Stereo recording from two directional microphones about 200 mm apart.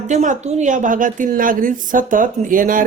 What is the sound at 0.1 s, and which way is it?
A woman's voice, 35° right (ahead or behind).